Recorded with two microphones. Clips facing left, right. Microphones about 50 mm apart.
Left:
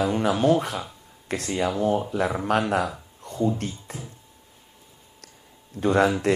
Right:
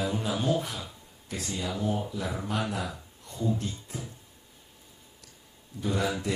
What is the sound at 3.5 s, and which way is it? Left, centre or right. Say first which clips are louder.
Speech: left 3 dB; left.